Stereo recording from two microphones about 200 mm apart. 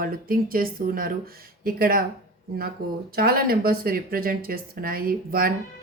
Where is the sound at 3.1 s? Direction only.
50° right (ahead or behind).